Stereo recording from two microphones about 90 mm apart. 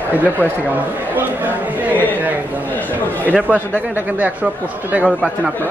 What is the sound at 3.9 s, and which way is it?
A man's voice, 15° right (ahead or behind).